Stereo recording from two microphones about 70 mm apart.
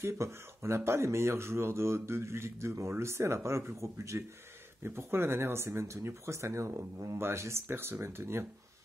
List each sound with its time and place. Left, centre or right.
0.0 s speech: right
4.8 s speech: right